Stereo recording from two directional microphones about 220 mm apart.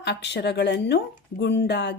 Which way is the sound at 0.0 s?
50° left (ahead or behind).